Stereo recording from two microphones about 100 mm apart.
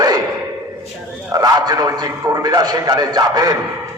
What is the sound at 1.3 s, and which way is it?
A man's voice, 40° right (ahead or behind).